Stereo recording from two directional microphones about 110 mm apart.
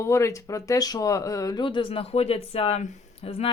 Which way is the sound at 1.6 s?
50° left (ahead or behind).